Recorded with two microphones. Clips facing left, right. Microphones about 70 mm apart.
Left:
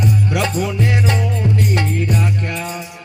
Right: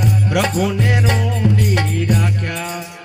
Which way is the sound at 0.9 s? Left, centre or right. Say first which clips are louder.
Even; right.